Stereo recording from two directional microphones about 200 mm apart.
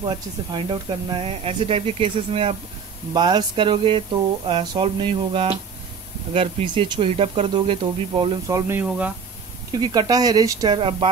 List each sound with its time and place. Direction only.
0.0 s speech: 20° right (ahead or behind); by 9.1 s 5° right (ahead or behind)
9.7 s speech: 20° right (ahead or behind)